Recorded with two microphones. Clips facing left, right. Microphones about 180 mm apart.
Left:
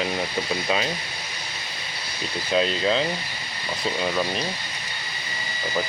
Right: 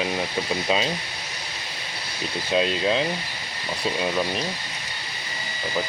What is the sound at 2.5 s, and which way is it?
Speech, 10° right (ahead or behind).